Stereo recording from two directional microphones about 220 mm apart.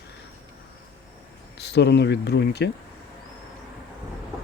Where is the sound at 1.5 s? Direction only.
50° left (ahead or behind).